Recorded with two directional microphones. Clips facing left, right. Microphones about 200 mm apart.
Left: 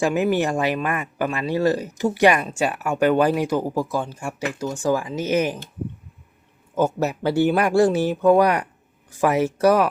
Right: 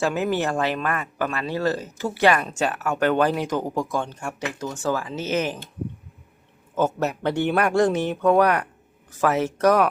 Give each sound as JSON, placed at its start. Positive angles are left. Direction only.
{"t": 0.0, "sound": "speech", "side_deg": 15}
{"t": 6.7, "sound": "speech", "side_deg": 10}